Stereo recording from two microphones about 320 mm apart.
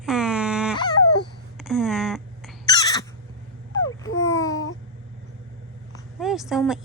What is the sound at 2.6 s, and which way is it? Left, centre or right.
Crow, centre.